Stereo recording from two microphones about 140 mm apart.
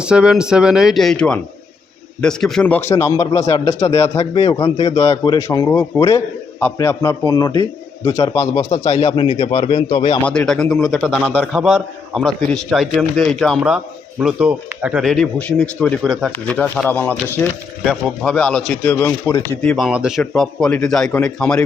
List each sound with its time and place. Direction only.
0.0 s a man's voice: 5° right (ahead or behind); by 3.9 s 25° left (ahead or behind)
4.2 s a man's voice: 45° left (ahead or behind)
5.1 s a man's voice: 30° left (ahead or behind)
8.8 s a man's voice: 50° left (ahead or behind)
10.2 s a man's voice: 5° left (ahead or behind)
17.8 s a man's voice: centre (ahead or behind); by 19.5 s 20° left (ahead or behind)
19.6 s a man's voice: centre (ahead or behind)